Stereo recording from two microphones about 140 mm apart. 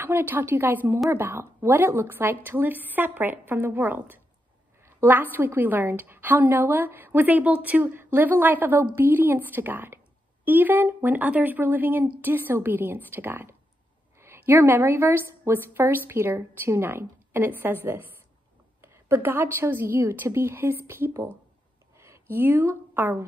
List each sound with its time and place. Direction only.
0.0 s a woman's voice: 15° right (ahead or behind)
18.8 s a woman's voice: 15° right (ahead or behind)
21.9 s a sound: 20° right (ahead or behind)